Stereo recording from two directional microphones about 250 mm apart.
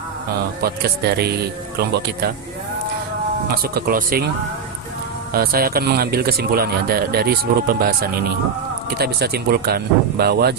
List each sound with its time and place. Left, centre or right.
0.6 s a man's voice: right
3.5 s a man's voice: right
5.3 s a man's voice: right